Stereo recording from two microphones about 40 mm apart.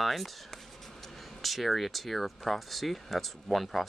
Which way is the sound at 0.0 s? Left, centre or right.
Centre.